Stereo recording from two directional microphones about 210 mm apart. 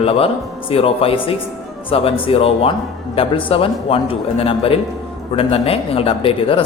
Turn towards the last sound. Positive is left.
turn(degrees=25)  # may be behind; listen again after turning